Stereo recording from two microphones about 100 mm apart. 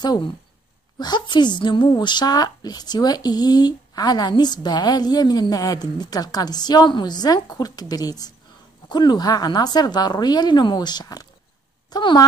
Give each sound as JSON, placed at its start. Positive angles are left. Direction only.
{"t": 0.9, "sound": "speech", "side_deg": 45}